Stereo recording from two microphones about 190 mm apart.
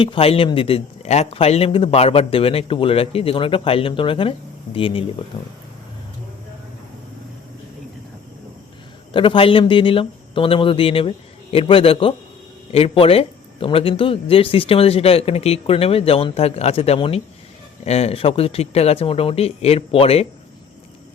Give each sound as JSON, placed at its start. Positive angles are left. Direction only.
{"t": 0.0, "sound": "a man's voice", "side_deg": 30}
{"t": 5.3, "sound": "speech", "side_deg": 15}
{"t": 9.1, "sound": "a man's voice", "side_deg": 25}